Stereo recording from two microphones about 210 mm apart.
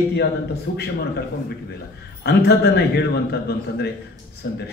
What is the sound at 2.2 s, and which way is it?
Speech, 50° left (ahead or behind).